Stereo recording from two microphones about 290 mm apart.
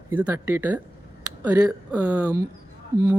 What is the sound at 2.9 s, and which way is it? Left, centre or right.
Speech, right.